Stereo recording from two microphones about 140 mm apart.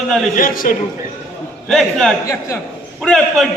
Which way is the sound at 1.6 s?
Centre (ahead or behind).